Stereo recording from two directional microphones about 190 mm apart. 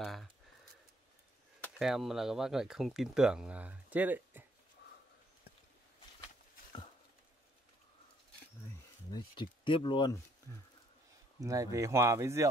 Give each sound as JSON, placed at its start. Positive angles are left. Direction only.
{"t": 0.0, "sound": "a sound", "side_deg": 0}
{"t": 1.6, "sound": "speech", "side_deg": 0}
{"t": 9.1, "sound": "speech", "side_deg": 25}
{"t": 11.4, "sound": "speech", "side_deg": -15}